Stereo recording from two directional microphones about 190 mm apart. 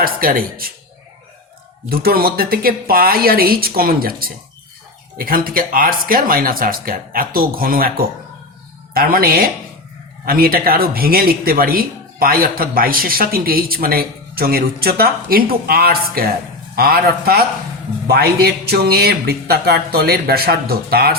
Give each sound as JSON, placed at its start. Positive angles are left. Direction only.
{"t": 0.0, "sound": "speech", "side_deg": -50}
{"t": 1.9, "sound": "speech", "side_deg": -50}